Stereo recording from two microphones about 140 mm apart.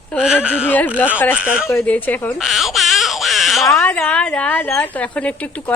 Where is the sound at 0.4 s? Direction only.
10° right (ahead or behind).